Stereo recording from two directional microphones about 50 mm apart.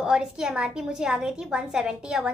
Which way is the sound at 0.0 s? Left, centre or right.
Centre.